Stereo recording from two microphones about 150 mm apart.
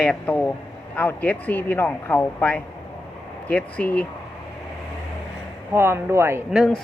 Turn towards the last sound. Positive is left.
turn(degrees=0)  # may be behind; listen again after turning